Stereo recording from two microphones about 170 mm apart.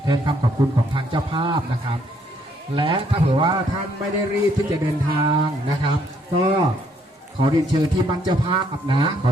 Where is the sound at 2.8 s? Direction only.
30° right (ahead or behind).